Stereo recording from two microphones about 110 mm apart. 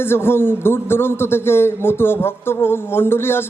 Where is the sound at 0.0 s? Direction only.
20° left (ahead or behind).